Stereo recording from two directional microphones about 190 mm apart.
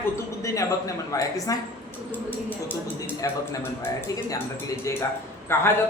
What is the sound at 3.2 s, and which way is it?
A man's voice, 15° left (ahead or behind).